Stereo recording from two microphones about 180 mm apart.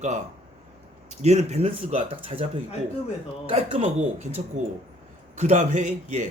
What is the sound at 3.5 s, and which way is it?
Speech, 40° right (ahead or behind).